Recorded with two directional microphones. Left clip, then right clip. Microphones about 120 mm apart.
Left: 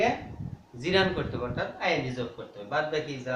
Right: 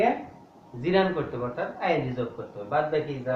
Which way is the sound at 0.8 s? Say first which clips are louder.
Right 2 dB; 35° left (ahead or behind).